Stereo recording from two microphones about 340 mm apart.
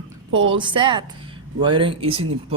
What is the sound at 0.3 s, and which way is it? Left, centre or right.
Speech, right.